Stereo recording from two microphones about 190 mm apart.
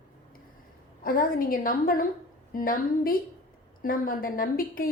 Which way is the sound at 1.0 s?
50° left (ahead or behind).